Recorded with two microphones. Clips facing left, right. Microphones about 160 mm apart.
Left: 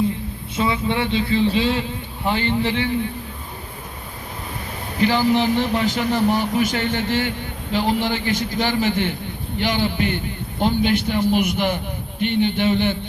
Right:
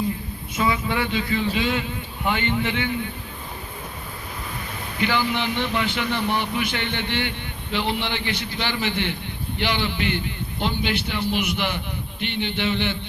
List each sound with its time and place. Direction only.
0.5 s a sound: 30° left (ahead or behind)
2.2 s speech: 30° left (ahead or behind)
4.9 s a man's voice: 35° left (ahead or behind)